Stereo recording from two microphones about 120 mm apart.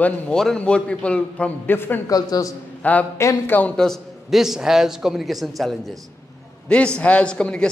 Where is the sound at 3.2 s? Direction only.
25° left (ahead or behind).